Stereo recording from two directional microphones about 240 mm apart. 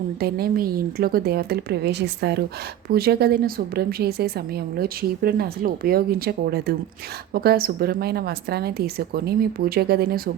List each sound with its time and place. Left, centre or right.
0.2 s a woman's voice: right